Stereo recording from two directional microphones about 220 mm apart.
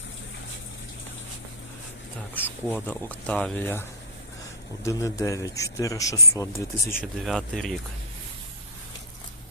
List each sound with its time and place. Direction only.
2.6 s a man's voice: 5° left (ahead or behind)
7.0 s speech: centre (ahead or behind)